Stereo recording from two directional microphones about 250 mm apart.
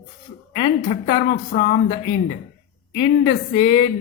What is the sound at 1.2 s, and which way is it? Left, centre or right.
Speech, left.